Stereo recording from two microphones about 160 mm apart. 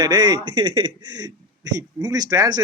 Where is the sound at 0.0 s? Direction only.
25° right (ahead or behind).